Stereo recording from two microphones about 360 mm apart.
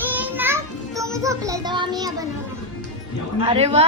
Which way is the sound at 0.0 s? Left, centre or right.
Centre.